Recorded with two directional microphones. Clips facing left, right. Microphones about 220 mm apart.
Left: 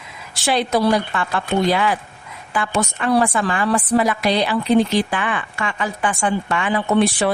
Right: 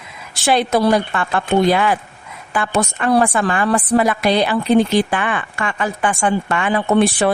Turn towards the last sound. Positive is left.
turn(degrees=-50)  # may be behind; listen again after turning